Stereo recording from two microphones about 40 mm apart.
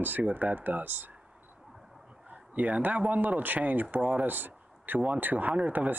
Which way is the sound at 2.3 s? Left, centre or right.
Right.